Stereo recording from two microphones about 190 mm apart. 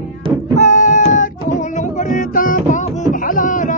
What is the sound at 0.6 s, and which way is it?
Music, 40° left (ahead or behind).